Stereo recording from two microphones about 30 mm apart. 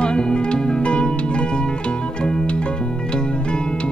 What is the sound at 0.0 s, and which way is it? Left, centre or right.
Music, left.